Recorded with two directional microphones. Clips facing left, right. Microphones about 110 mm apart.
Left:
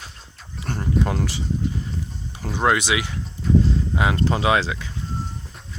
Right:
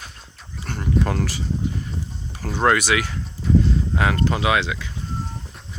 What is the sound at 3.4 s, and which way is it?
Speech, centre (ahead or behind).